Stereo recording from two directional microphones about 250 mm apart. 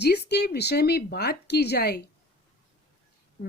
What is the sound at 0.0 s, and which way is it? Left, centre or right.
Speech, left.